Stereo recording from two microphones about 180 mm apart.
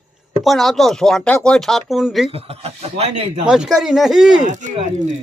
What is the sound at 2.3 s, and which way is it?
Speech, 35° right (ahead or behind).